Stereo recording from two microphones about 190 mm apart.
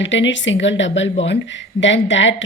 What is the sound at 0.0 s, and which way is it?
A woman's voice, 75° left (ahead or behind).